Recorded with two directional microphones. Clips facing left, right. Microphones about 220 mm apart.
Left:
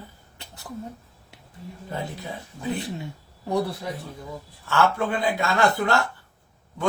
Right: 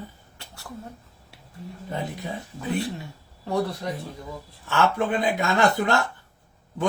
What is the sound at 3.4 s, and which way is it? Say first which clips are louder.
Speech: even; 10° left (ahead or behind).